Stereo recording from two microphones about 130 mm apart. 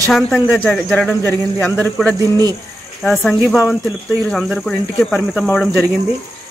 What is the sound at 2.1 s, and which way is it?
Speech, 25° right (ahead or behind).